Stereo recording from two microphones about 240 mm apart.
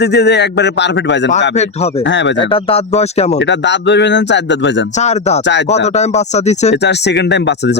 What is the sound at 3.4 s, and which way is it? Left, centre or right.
Speech, left.